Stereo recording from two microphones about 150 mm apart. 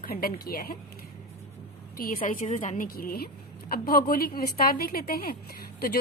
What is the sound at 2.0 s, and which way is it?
A woman's voice, 70° left (ahead or behind).